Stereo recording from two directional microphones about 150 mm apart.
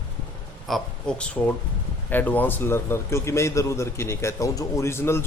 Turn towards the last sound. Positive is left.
turn(degrees=15)  # may be behind; listen again after turning